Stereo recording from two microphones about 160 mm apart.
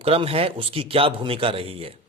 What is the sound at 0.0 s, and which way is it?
Speech, 35° right (ahead or behind).